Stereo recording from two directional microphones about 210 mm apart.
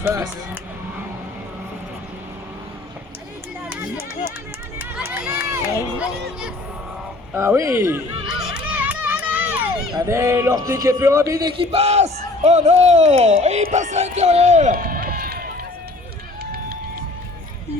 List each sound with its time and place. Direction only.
0.0 s speech: 15° right (ahead or behind)
3.7 s run: 10° right (ahead or behind)
7.3 s a man's voice: 15° right (ahead or behind); by 15.4 s 45° right (ahead or behind)